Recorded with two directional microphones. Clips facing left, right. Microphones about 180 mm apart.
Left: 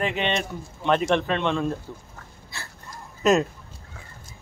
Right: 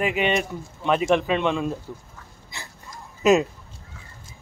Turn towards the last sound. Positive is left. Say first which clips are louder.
# right 2 dB
turn(degrees=0)  # may be behind; listen again after turning